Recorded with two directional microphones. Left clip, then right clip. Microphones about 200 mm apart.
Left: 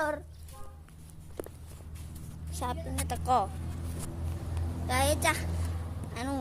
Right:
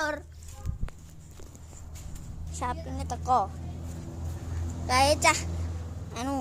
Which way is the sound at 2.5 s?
5° left (ahead or behind).